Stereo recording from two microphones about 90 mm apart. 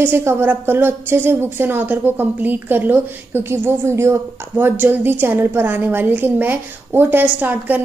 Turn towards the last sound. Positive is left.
turn(degrees=-20)  # may be behind; listen again after turning